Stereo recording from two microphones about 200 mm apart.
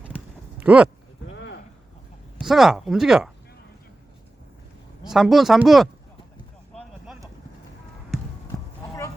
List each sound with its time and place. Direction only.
0.6 s speech: 5° right (ahead or behind)
1.3 s a sound: 65° left (ahead or behind)
2.4 s speech: centre (ahead or behind)
5.0 s speech: centre (ahead or behind)